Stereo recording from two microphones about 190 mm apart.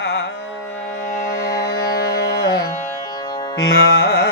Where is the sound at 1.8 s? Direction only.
55° left (ahead or behind).